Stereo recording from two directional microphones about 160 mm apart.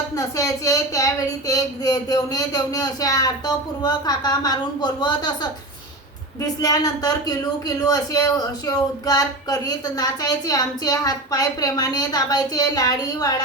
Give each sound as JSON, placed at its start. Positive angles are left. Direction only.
{"t": 0.1, "sound": "speech", "side_deg": 20}